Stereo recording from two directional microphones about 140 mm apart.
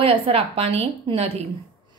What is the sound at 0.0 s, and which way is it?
A woman's voice, 45° right (ahead or behind).